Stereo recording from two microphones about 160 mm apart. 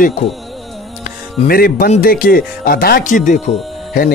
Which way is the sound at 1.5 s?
65° left (ahead or behind).